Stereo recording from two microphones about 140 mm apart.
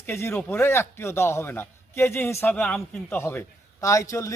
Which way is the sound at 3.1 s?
15° left (ahead or behind).